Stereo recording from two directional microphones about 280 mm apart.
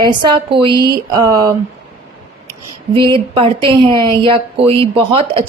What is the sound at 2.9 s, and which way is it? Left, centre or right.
Speech, centre.